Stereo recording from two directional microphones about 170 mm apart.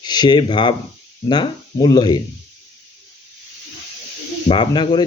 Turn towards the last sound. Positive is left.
turn(degrees=25)  # may be behind; listen again after turning